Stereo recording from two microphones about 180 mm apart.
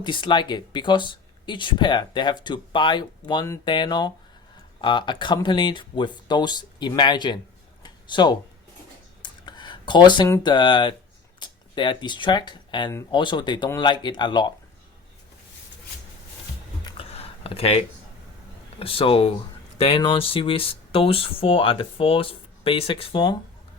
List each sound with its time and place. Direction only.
0.0 s speech: 25° left (ahead or behind)
7.8 s a sound: 25° left (ahead or behind)
10.4 s speech: 25° left (ahead or behind)
13.1 s speech: 25° left (ahead or behind)
16.8 s a sound: 35° left (ahead or behind)
18.8 s speech: 30° left (ahead or behind)